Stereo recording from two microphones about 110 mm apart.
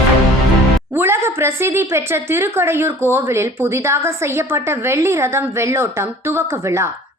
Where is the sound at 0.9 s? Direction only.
25° right (ahead or behind).